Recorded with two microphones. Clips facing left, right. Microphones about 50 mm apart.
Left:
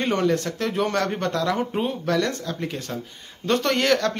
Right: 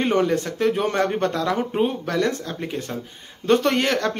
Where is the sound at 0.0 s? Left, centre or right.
Centre.